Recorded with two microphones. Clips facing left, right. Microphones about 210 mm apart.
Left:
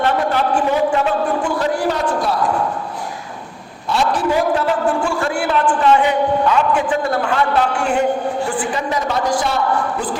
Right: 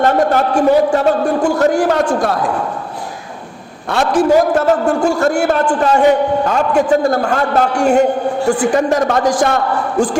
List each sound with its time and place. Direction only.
0.0 s a man's voice: 45° right (ahead or behind)
3.8 s a man's voice: 50° right (ahead or behind)